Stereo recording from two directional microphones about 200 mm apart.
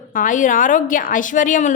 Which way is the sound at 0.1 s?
40° left (ahead or behind).